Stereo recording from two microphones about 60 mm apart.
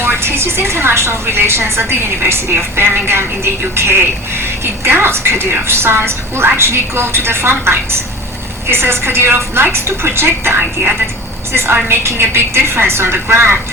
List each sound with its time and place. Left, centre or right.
0.0 s a woman's voice: right